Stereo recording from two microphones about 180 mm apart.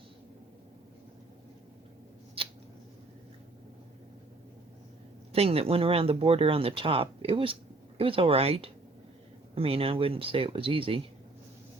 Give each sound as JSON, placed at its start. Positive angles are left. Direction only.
{"t": 2.4, "sound": "scissors", "side_deg": -30}
{"t": 5.3, "sound": "speech", "side_deg": -35}